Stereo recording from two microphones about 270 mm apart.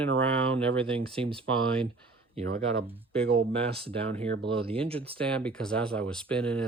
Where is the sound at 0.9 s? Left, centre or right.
Centre.